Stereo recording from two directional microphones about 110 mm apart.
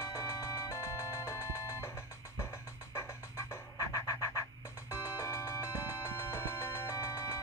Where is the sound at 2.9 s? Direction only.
30° left (ahead or behind).